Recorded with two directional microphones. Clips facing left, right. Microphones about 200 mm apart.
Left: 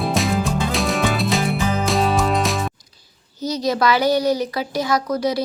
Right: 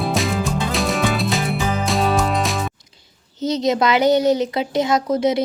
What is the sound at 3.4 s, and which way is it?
Speech, 25° right (ahead or behind).